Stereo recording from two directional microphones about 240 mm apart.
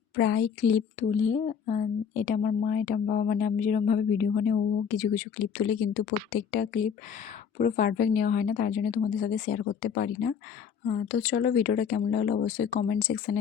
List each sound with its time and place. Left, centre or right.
0.2 s a woman's voice: left